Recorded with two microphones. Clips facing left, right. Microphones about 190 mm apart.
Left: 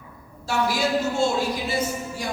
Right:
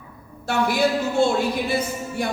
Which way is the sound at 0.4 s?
60° right (ahead or behind).